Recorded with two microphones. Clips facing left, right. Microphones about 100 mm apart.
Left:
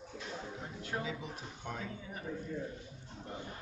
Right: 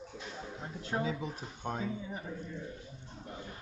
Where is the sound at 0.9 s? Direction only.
30° right (ahead or behind).